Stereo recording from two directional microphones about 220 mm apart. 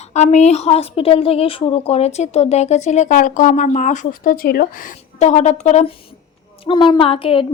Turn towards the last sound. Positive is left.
turn(degrees=25)  # may be behind; listen again after turning